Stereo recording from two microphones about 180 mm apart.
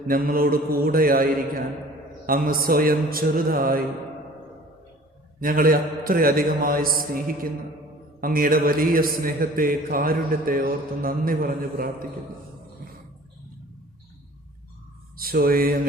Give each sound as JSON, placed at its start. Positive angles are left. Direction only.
{"t": 0.1, "sound": "a man's voice", "side_deg": -55}
{"t": 5.4, "sound": "a man's voice", "side_deg": -50}
{"t": 15.2, "sound": "music", "side_deg": -55}